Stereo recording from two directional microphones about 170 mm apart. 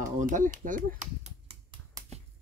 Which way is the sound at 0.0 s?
50° right (ahead or behind).